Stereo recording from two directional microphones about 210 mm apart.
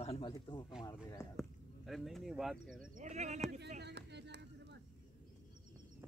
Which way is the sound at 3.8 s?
55° right (ahead or behind).